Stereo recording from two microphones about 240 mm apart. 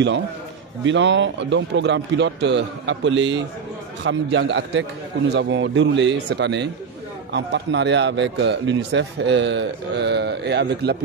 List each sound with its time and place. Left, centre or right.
0.8 s a man's voice: right